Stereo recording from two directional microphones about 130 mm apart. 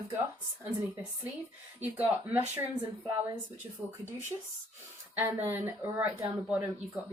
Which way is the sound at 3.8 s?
Centre (ahead or behind).